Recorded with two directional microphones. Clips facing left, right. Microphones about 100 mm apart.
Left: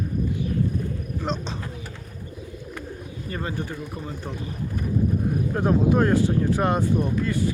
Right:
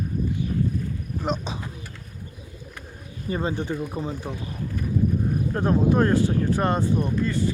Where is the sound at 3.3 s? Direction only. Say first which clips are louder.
Right 5 dB; 20° right (ahead or behind).